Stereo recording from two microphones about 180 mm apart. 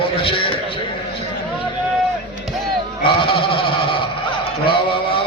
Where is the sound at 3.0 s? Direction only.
30° left (ahead or behind).